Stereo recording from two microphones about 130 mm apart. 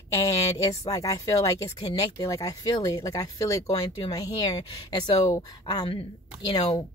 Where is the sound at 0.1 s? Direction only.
25° left (ahead or behind).